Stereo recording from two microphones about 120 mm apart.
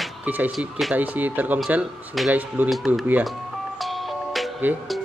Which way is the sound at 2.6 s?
Centre (ahead or behind).